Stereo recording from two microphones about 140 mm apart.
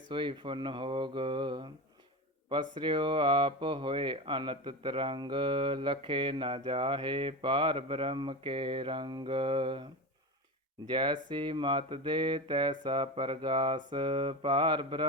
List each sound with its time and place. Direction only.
0.1 s speech: 35° right (ahead or behind)
10.8 s speech: 35° right (ahead or behind)